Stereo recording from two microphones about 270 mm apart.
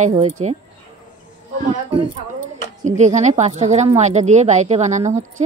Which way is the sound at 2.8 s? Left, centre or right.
Right.